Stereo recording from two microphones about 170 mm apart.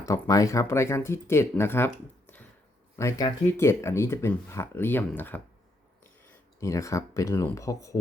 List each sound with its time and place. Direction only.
0.0 s speech: 20° left (ahead or behind)
2.9 s speech: 15° left (ahead or behind)
6.6 s speech: 20° left (ahead or behind)